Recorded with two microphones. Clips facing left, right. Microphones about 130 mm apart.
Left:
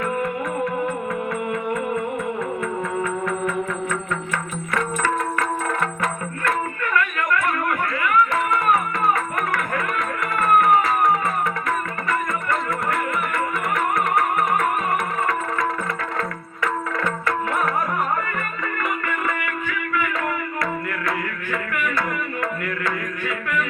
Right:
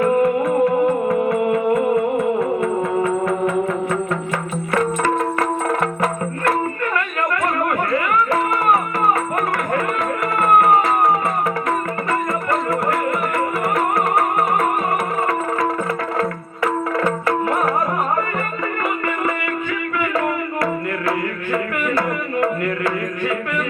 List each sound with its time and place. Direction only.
0.0 s music: 30° right (ahead or behind)
4.7 s music: 35° right (ahead or behind)
10.3 s music: 30° right (ahead or behind)
13.7 s music: 30° right (ahead or behind)
20.0 s music: 30° right (ahead or behind)